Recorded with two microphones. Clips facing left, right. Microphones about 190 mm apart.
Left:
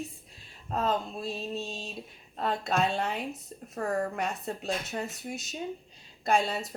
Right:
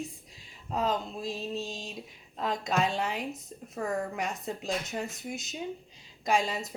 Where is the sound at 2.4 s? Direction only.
15° right (ahead or behind).